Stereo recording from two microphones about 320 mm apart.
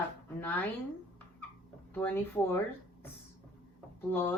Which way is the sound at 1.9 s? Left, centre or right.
Centre.